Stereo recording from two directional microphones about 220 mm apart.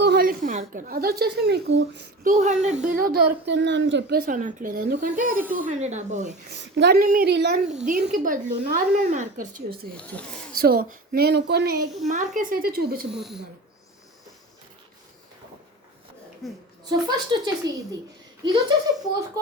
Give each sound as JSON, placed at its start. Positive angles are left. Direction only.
{"t": 0.0, "sound": "a woman's voice", "side_deg": -45}
{"t": 2.3, "sound": "a woman's voice", "side_deg": -30}
{"t": 6.6, "sound": "speech", "side_deg": -50}
{"t": 7.9, "sound": "a woman's voice", "side_deg": -35}
{"t": 10.0, "sound": "speech", "side_deg": 5}
{"t": 10.5, "sound": "speech", "side_deg": -45}
{"t": 12.0, "sound": "a woman's voice", "side_deg": -35}
{"t": 13.1, "sound": "speech", "side_deg": 0}
{"t": 16.4, "sound": "speech", "side_deg": 0}
{"t": 16.9, "sound": "speech", "side_deg": -20}